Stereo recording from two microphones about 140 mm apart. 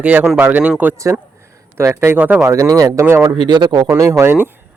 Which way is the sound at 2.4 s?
25° right (ahead or behind).